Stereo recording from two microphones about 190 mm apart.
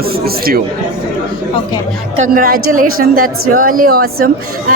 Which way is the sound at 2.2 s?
50° right (ahead or behind).